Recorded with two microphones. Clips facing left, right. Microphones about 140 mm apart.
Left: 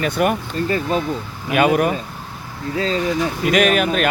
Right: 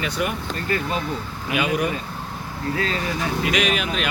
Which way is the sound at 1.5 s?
55° left (ahead or behind).